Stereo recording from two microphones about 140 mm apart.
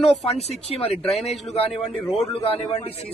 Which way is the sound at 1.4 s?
45° left (ahead or behind).